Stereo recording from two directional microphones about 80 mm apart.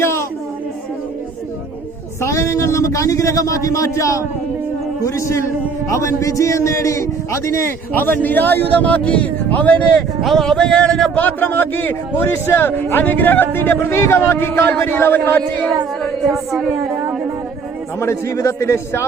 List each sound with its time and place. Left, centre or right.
0.0 s a sound: left
2.2 s speech: left
7.9 s a man's voice: left
10.2 s speech: centre
11.1 s a man's voice: left
16.3 s speech: centre
18.0 s speech: left